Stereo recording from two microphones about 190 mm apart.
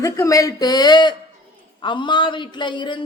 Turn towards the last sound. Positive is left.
turn(degrees=25)  # may be behind; listen again after turning